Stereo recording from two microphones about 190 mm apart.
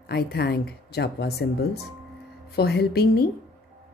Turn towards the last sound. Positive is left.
turn(degrees=55)  # may be behind; listen again after turning